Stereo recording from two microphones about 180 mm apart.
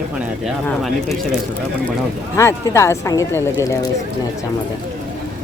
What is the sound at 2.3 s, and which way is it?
Speech, 15° left (ahead or behind).